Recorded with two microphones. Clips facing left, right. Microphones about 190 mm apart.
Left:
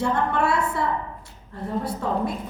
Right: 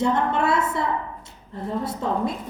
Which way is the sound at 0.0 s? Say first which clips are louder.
Right 1 dB; 20° right (ahead or behind).